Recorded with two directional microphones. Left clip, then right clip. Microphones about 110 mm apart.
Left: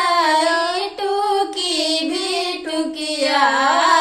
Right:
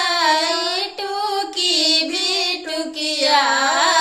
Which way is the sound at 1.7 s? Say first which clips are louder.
Right 2 dB; 45° right (ahead or behind).